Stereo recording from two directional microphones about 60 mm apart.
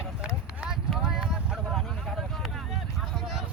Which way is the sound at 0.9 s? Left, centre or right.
Centre.